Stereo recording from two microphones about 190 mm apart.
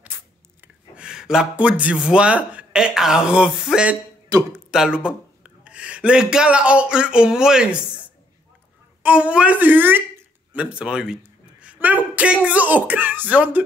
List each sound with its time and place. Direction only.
0.6 s speech: 5° right (ahead or behind)
4.3 s speech: 15° right (ahead or behind)
4.6 s speech: 5° right (ahead or behind)
9.0 s speech: 5° right (ahead or behind)